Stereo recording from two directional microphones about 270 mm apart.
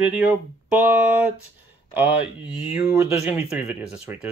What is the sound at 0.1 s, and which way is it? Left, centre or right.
Speech, centre.